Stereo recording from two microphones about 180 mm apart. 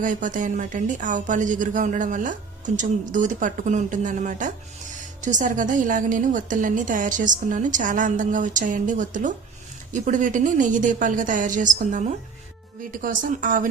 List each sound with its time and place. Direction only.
0.0 s a woman's voice: 45° right (ahead or behind)